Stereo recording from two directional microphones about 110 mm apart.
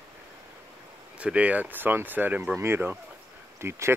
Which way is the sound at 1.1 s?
10° right (ahead or behind).